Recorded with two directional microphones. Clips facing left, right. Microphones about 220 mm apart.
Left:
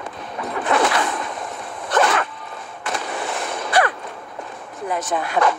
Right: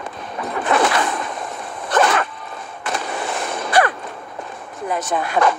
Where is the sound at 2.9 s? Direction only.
45° right (ahead or behind).